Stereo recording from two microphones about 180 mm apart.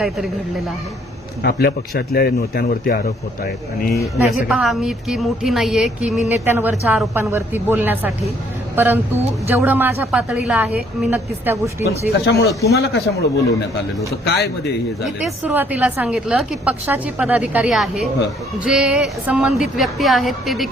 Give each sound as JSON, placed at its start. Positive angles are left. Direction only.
{"t": 1.4, "sound": "speech", "side_deg": 65}
{"t": 4.0, "sound": "a woman's voice", "side_deg": 0}
{"t": 12.2, "sound": "speech", "side_deg": 60}
{"t": 12.5, "sound": "speech", "side_deg": 15}
{"t": 12.7, "sound": "speech", "side_deg": 65}
{"t": 14.3, "sound": "speech", "side_deg": 60}
{"t": 15.0, "sound": "a woman's voice", "side_deg": -5}